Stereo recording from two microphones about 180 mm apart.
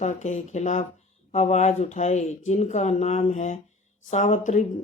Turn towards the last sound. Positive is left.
turn(degrees=45)  # may be behind; listen again after turning